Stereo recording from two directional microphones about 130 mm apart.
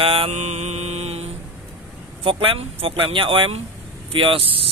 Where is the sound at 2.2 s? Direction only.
45° right (ahead or behind).